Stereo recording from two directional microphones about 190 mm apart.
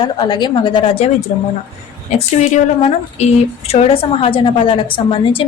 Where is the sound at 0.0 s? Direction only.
25° left (ahead or behind).